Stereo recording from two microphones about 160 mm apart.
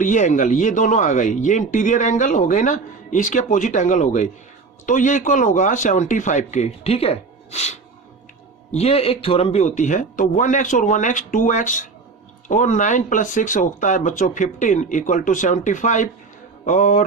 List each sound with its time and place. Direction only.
0.0 s speech: 50° left (ahead or behind)